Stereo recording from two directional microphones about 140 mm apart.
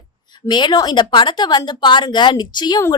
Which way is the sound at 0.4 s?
35° left (ahead or behind).